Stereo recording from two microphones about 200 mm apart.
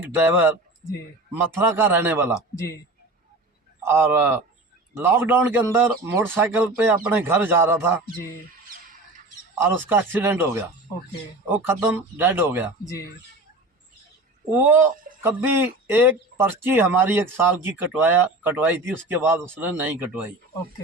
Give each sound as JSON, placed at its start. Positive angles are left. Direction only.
{"t": 1.5, "sound": "speech", "side_deg": -10}
{"t": 3.8, "sound": "speech", "side_deg": -10}
{"t": 9.6, "sound": "speech", "side_deg": -10}
{"t": 12.8, "sound": "speech", "side_deg": 15}
{"t": 14.6, "sound": "speech", "side_deg": -10}